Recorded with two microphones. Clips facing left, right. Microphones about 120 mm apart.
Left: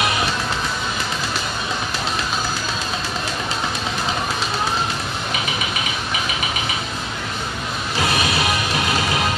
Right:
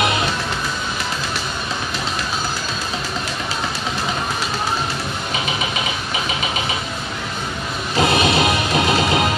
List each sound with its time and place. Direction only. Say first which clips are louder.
8.0 s music: right 5 dB; 25° right (ahead or behind)